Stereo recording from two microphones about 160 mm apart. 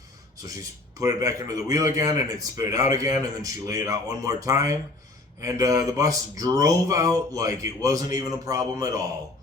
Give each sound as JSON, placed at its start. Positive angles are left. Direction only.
{"t": 0.4, "sound": "speech", "side_deg": -20}